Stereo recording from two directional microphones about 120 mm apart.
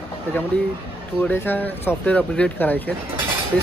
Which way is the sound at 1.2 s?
15° left (ahead or behind).